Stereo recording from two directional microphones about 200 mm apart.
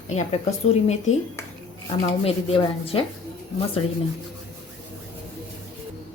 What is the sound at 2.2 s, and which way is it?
Speech, 25° left (ahead or behind).